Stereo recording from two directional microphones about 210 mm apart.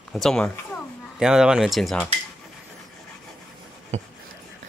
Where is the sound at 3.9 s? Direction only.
30° right (ahead or behind).